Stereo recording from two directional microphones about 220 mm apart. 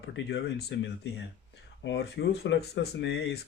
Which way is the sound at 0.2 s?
50° left (ahead or behind).